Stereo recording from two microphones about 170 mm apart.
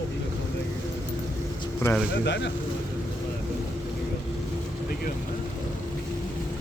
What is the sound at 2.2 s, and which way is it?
Speech, 90° left.